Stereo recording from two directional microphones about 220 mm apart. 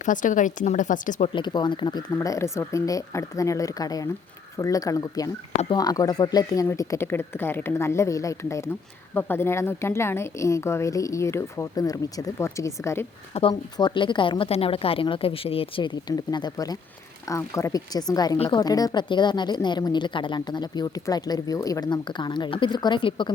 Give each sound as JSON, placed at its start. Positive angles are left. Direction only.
{"t": 0.0, "sound": "speech", "side_deg": 35}
{"t": 1.3, "sound": "speech", "side_deg": 20}